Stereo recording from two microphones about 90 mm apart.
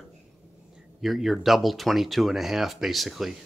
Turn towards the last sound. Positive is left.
turn(degrees=0)  # may be behind; listen again after turning